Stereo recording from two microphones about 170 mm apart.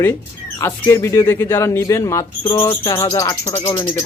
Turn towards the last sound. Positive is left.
turn(degrees=15)  # may be behind; listen again after turning